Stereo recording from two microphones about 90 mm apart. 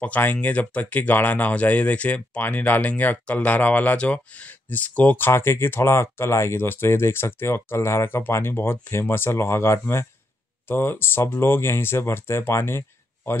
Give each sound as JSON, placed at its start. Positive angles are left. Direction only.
{"t": 0.0, "sound": "speech", "side_deg": 20}